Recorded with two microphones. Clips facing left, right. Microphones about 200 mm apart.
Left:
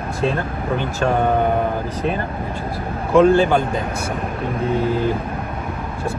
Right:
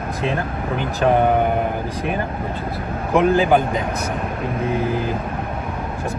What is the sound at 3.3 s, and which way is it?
Speech, 15° right (ahead or behind).